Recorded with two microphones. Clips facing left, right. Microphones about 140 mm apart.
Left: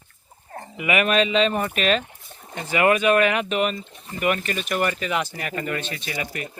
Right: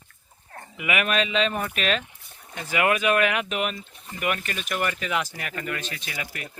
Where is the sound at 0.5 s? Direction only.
30° left (ahead or behind).